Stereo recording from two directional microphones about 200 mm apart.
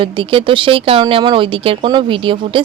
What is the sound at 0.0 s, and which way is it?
A woman's voice, 25° right (ahead or behind).